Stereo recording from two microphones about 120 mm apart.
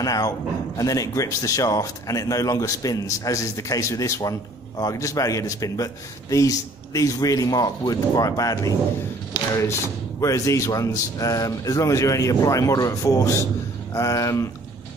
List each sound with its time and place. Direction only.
0.0 s a man's voice: 30° left (ahead or behind)
10.2 s a man's voice: 25° left (ahead or behind)